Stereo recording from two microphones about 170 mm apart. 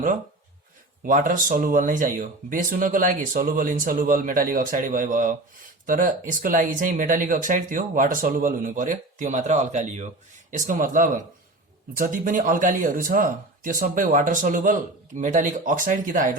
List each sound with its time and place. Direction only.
1.0 s speech: 50° right (ahead or behind)